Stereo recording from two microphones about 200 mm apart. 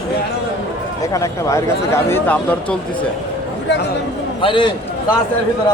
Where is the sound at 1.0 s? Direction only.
15° left (ahead or behind).